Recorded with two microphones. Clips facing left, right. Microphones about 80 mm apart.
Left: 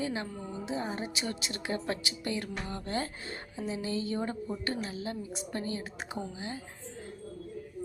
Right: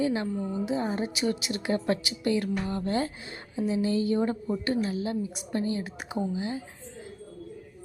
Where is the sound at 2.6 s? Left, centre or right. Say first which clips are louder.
Right 6 dB; right.